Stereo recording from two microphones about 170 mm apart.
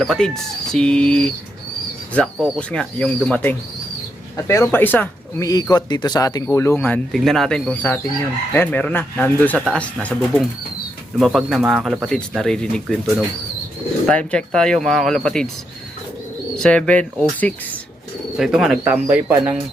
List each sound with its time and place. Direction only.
0.0 s speech: centre (ahead or behind)
4.4 s speech: 15° left (ahead or behind); by 15.4 s centre (ahead or behind)
16.6 s speech: 5° left (ahead or behind)